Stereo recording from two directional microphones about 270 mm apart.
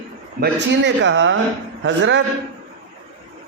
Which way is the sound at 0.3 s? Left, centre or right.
Right.